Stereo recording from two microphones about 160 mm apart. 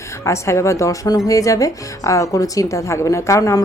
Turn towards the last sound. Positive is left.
turn(degrees=20)  # may be behind; listen again after turning